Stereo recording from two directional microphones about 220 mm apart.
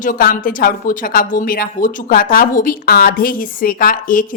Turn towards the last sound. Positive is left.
turn(degrees=40)  # may be behind; listen again after turning